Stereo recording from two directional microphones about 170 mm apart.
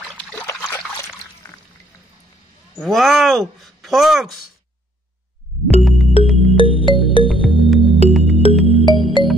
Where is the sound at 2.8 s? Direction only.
Centre (ahead or behind).